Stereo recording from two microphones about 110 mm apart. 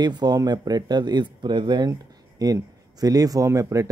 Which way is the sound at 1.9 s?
30° right (ahead or behind).